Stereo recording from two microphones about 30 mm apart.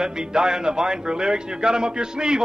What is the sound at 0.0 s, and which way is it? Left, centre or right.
A man's voice, right.